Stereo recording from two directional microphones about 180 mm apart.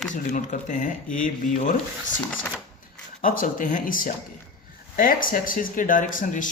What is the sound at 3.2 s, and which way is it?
Speech, 50° left (ahead or behind).